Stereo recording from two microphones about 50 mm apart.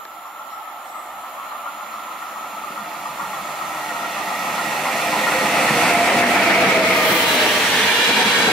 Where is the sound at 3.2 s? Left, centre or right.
Centre.